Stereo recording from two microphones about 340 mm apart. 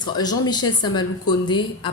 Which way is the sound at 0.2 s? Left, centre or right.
Centre.